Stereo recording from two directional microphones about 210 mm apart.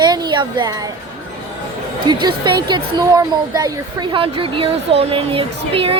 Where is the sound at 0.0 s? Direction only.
20° right (ahead or behind).